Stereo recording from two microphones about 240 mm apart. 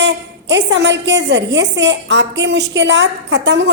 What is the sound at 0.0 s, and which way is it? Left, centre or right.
A woman's voice, right.